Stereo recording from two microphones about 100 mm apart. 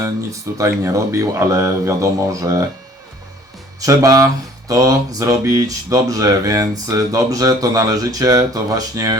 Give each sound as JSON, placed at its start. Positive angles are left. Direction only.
{"t": 0.0, "sound": "speech", "side_deg": -30}
{"t": 3.8, "sound": "speech", "side_deg": -35}